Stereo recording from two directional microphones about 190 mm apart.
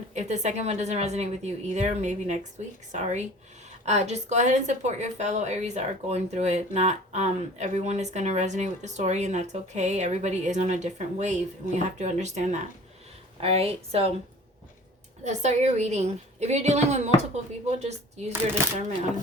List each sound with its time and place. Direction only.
0.1 s a woman's voice: 40° right (ahead or behind)
15.2 s a woman's voice: 35° right (ahead or behind)
18.3 s speech: 15° right (ahead or behind)